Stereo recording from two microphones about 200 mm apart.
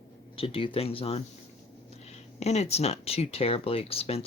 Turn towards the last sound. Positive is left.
turn(degrees=30)  # may be behind; listen again after turning